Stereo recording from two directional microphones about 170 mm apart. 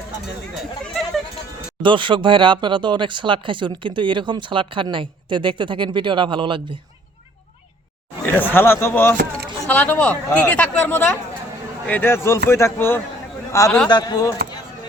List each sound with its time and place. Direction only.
1.8 s speech: 30° right (ahead or behind)
8.3 s a man's voice: 10° left (ahead or behind)
13.9 s speech: 25° left (ahead or behind)